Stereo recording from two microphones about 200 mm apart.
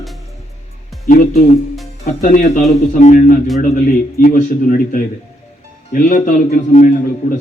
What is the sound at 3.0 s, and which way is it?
Speech, 40° left (ahead or behind).